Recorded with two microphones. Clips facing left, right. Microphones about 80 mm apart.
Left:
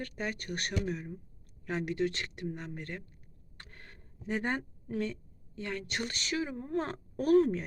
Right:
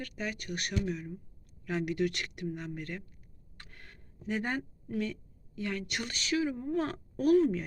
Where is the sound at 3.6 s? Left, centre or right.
Left.